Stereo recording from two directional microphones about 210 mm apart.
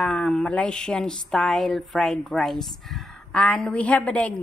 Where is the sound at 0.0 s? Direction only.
5° left (ahead or behind).